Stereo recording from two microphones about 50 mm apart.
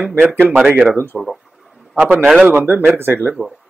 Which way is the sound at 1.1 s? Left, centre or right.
Centre.